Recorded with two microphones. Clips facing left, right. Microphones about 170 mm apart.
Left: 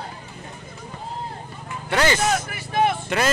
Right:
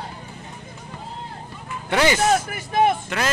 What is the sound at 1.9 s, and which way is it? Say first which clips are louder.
Speech: right 1 dB; 15° right (ahead or behind).